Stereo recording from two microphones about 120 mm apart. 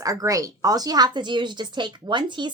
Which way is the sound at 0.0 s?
30° right (ahead or behind).